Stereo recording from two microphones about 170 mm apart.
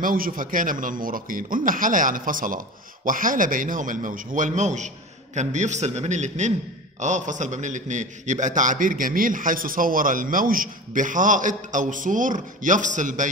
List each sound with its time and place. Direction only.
0.0 s a man's voice: 55° right (ahead or behind)